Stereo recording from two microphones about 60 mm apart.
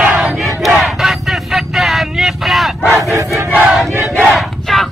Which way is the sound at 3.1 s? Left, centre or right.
Right.